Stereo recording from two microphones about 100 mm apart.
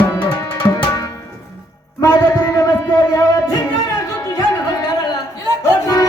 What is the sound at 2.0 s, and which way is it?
Music, 35° left (ahead or behind).